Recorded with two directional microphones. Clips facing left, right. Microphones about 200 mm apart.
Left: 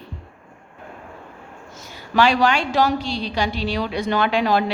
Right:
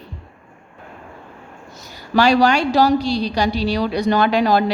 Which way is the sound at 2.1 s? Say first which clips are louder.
Right 3 dB; 40° right (ahead or behind).